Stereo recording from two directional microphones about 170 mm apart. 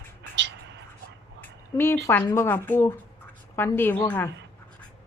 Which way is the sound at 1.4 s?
15° left (ahead or behind).